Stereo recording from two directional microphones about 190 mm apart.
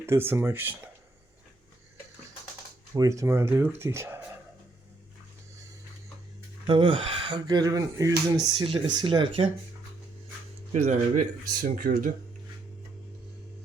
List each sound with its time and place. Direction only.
0.0 s speech: 10° right (ahead or behind)
2.9 s speech: 15° right (ahead or behind)
6.7 s speech: 25° right (ahead or behind)
10.7 s speech: 35° right (ahead or behind)
11.6 s speech: 45° right (ahead or behind)